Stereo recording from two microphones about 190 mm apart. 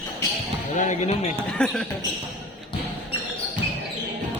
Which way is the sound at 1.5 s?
Centre (ahead or behind).